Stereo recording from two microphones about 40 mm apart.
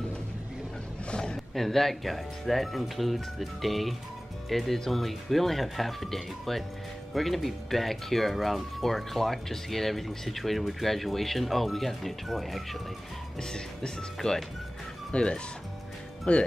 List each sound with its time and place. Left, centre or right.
1.1 s a sound: centre
1.5 s speech: centre
13.4 s speech: centre